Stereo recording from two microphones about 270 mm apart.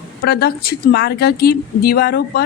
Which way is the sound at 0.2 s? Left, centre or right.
Left.